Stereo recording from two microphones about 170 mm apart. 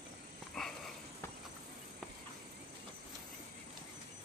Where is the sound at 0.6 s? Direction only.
Centre (ahead or behind).